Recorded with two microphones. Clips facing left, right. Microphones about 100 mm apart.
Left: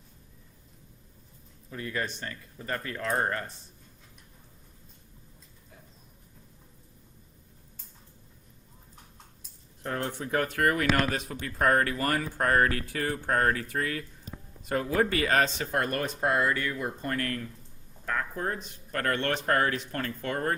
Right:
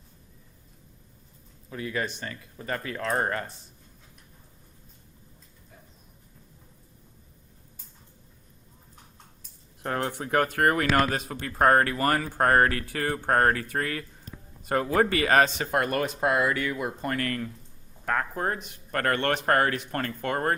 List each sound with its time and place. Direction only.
1.7 s speech: 90° right
9.8 s speech: 70° right (ahead or behind); by 12.8 s 55° right (ahead or behind)
12.9 s speech: 65° right (ahead or behind)
18.0 s speech: 65° right (ahead or behind)